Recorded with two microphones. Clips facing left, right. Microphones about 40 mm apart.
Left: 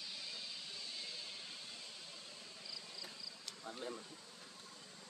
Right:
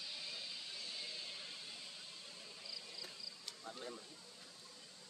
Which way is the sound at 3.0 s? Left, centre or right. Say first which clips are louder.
Left 1 dB; centre.